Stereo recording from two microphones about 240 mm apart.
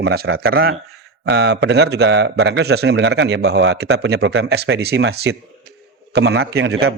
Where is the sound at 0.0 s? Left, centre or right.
Right.